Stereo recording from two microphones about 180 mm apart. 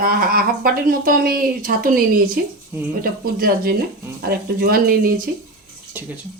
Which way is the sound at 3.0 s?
55° right (ahead or behind).